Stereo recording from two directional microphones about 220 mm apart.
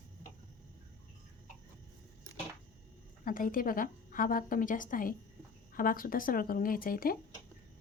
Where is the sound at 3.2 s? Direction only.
40° left (ahead or behind).